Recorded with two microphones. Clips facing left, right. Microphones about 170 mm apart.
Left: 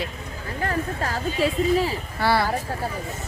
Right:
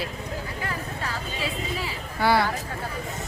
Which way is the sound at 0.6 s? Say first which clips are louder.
Left 10 dB; 40° left (ahead or behind).